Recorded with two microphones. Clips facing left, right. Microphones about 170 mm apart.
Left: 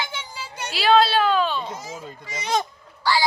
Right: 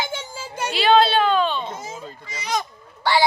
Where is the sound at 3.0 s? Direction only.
60° right (ahead or behind).